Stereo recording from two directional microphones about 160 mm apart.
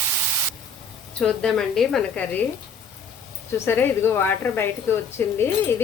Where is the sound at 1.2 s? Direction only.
5° left (ahead or behind).